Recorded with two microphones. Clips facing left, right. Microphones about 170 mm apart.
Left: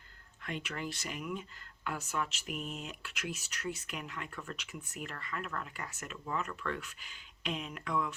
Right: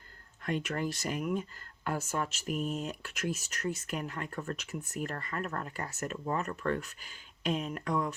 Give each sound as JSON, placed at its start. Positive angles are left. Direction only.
{"t": 0.4, "sound": "speech", "side_deg": -45}